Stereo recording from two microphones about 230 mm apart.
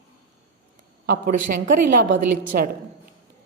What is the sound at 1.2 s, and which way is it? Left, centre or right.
A woman's voice, right.